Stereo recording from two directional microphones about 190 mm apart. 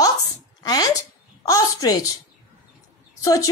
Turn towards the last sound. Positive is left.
turn(degrees=20)  # may be behind; listen again after turning